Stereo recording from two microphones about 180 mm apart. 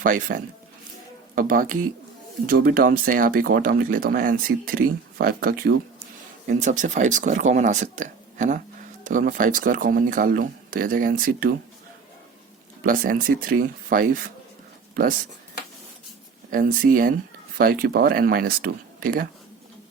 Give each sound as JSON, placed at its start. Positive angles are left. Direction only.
{"t": 0.0, "sound": "speech", "side_deg": -50}
{"t": 6.5, "sound": "speech", "side_deg": -45}
{"t": 12.8, "sound": "speech", "side_deg": -50}
{"t": 16.5, "sound": "speech", "side_deg": -50}